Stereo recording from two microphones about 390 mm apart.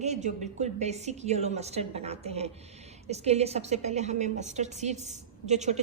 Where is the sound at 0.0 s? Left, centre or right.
Centre.